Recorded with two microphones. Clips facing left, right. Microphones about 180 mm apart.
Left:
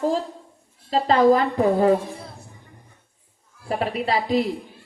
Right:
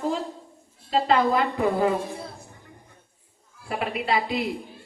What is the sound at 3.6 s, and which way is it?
Speech, 35° left (ahead or behind).